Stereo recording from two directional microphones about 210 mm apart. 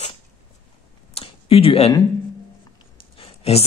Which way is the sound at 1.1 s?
25° left (ahead or behind).